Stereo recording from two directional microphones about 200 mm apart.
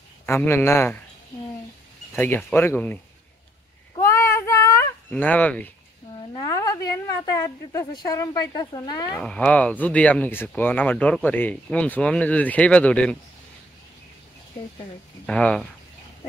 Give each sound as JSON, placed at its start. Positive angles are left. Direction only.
{"t": 0.3, "sound": "speech", "side_deg": 10}
{"t": 2.1, "sound": "speech", "side_deg": 10}
{"t": 3.9, "sound": "a sound", "side_deg": 15}
{"t": 8.0, "sound": "speech", "side_deg": 20}
{"t": 9.2, "sound": "speech", "side_deg": 5}
{"t": 15.2, "sound": "speech", "side_deg": 5}